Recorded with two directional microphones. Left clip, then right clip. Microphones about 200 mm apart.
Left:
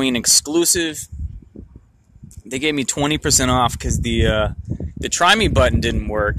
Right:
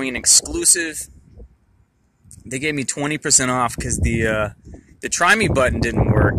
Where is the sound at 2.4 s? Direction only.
10° left (ahead or behind).